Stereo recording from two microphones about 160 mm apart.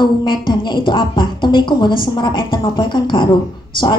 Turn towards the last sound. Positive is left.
turn(degrees=30)  # may be behind; listen again after turning